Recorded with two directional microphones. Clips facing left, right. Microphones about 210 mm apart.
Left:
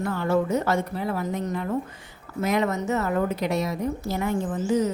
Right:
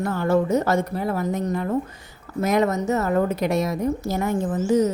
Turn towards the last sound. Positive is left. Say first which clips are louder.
# right 3 dB
turn(degrees=-45)  # may be behind; listen again after turning